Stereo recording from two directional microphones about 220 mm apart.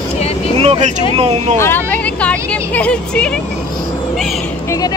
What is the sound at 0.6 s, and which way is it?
Vehicle, 30° right (ahead or behind).